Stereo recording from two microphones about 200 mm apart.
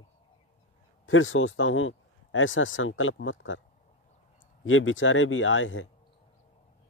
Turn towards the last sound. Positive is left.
turn(degrees=75)  # may be behind; listen again after turning